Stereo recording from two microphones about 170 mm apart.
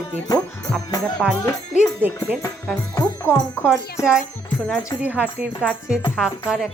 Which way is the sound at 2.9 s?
20° left (ahead or behind).